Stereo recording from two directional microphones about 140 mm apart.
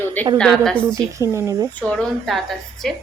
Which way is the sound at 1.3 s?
20° right (ahead or behind).